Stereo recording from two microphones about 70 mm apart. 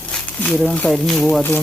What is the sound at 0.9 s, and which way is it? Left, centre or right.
Speech, centre.